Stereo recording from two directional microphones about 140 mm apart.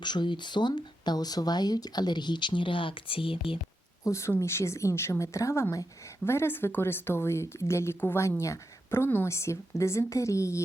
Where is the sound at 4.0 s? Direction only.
20° left (ahead or behind).